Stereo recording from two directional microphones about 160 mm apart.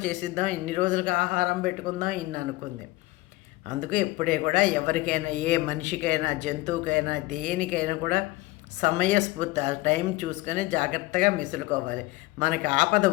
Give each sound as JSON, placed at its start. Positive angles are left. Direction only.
{"t": 0.0, "sound": "speech", "side_deg": -50}
{"t": 3.7, "sound": "speech", "side_deg": -55}